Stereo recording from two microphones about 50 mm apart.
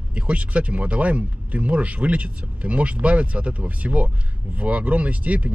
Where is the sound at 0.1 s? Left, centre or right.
Right.